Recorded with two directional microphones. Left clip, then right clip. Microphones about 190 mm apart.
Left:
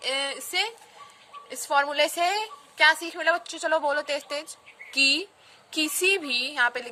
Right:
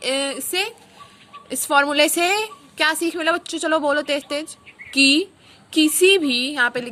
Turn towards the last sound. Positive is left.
turn(degrees=-10)  # may be behind; listen again after turning